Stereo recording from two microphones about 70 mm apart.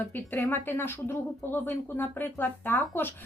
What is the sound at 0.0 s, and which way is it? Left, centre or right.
Speech, left.